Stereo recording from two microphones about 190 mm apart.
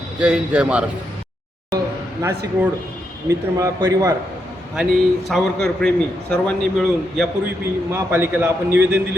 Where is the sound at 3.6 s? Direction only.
15° right (ahead or behind).